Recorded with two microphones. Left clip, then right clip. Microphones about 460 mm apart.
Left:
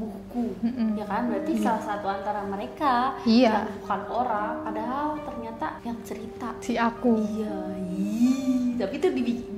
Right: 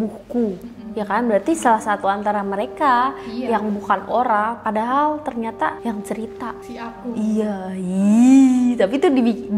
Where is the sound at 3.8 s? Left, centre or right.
Right.